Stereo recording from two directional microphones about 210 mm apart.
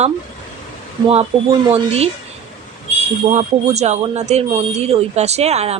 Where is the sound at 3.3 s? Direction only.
30° right (ahead or behind).